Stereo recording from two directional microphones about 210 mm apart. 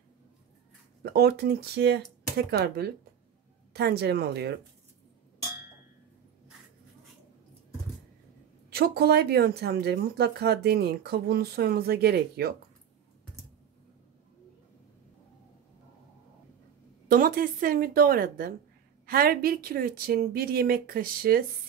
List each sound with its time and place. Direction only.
1.0 s speech: 50° right (ahead or behind)
8.6 s speech: 50° right (ahead or behind)
17.1 s speech: 45° right (ahead or behind)